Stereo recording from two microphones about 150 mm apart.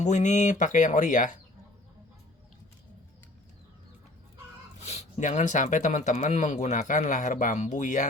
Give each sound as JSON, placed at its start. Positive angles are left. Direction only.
{"t": 0.0, "sound": "speech", "side_deg": 55}
{"t": 4.8, "sound": "speech", "side_deg": 45}